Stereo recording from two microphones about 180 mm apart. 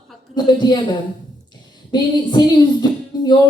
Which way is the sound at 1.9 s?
25° left (ahead or behind).